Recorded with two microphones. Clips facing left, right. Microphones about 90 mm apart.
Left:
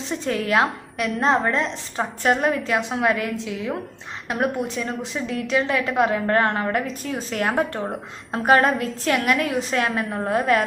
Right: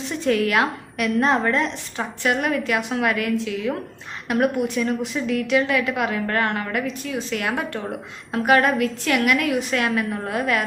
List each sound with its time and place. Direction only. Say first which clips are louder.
0.3 s a woman's voice: right 1 dB; 30° left (ahead or behind)